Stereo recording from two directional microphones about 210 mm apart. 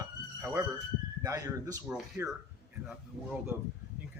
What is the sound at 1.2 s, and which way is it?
Speech, 15° right (ahead or behind).